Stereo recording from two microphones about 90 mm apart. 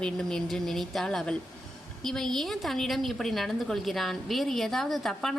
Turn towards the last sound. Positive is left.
turn(degrees=5)  # may be behind; listen again after turning